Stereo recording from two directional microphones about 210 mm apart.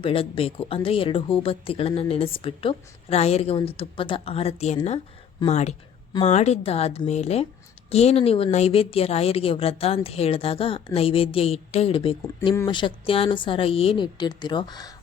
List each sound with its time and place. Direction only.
0.0 s speech: 25° left (ahead or behind)